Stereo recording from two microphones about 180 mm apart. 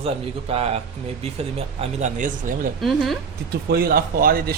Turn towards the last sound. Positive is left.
turn(degrees=-55)  # may be behind; listen again after turning